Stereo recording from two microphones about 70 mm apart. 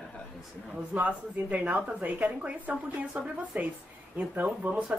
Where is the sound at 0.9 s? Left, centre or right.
Right.